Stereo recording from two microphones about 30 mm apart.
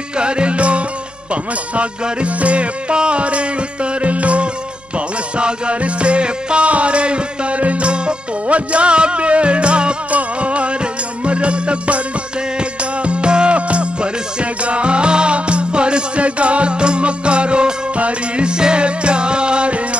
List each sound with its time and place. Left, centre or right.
0.2 s music: right
2.2 s music: right
8.5 s music: right
17.9 s music: right
18.4 s music: right